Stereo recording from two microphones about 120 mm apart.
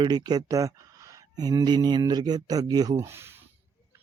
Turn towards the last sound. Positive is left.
turn(degrees=-20)  # may be behind; listen again after turning